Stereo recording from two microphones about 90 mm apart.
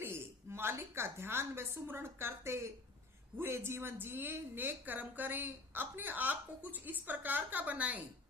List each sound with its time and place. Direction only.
0.0 s a woman's voice: 25° right (ahead or behind)